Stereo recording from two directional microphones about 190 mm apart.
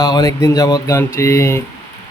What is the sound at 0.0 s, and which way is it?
Speech, 20° left (ahead or behind).